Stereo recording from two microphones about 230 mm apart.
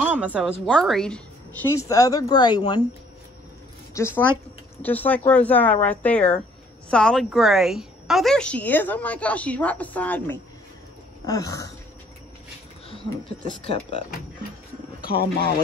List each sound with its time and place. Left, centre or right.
0.0 s a sound: centre
0.7 s speech: centre
3.9 s a woman's voice: centre
13.7 s speech: left
15.0 s wild animals: left